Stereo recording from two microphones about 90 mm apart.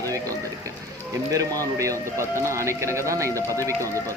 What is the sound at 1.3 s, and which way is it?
Speech, 40° right (ahead or behind).